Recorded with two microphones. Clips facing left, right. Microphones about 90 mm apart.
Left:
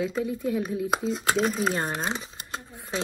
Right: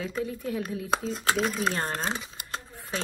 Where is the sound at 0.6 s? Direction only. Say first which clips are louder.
Left 2 dB; 5° left (ahead or behind).